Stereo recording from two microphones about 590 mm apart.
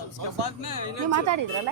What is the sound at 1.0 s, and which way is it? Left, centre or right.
Speech, right.